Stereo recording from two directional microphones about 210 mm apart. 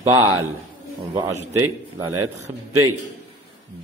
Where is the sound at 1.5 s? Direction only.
10° right (ahead or behind).